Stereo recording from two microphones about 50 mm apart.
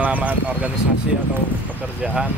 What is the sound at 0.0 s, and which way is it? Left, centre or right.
Vehicle, right.